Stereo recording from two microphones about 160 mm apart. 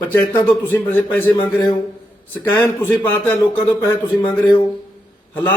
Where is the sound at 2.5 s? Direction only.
15° left (ahead or behind).